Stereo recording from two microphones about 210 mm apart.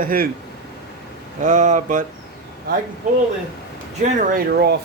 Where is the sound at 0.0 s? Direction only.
45° right (ahead or behind).